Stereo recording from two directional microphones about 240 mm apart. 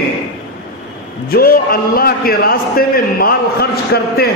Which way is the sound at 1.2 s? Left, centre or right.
Left.